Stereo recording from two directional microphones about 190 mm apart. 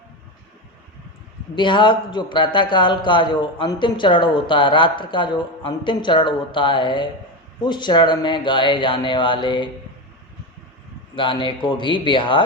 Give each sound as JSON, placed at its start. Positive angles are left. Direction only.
{"t": 1.5, "sound": "a man's voice", "side_deg": 25}
{"t": 11.1, "sound": "a man's voice", "side_deg": 25}